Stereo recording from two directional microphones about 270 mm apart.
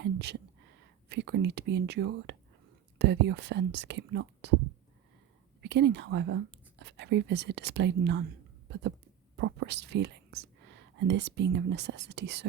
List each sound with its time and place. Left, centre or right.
0.0 s a sound: right
1.1 s speech: right
5.6 s speech: right
9.3 s speech: right